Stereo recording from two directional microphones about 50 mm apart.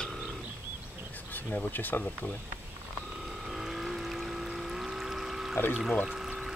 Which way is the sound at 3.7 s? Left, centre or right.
Centre.